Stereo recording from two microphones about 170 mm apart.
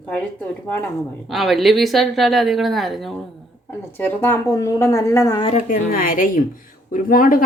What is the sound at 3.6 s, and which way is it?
A woman's voice, 15° left (ahead or behind).